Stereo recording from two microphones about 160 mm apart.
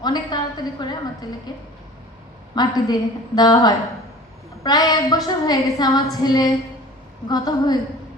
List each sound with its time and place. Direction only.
0.0 s a woman's voice: 25° left (ahead or behind)